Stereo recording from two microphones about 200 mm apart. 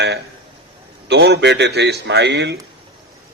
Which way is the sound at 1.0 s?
55° right (ahead or behind).